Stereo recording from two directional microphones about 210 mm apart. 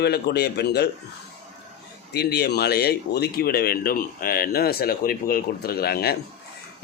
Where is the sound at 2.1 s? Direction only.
50° left (ahead or behind).